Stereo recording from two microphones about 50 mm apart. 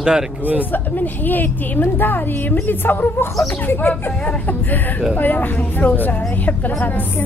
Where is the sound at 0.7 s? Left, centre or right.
Left.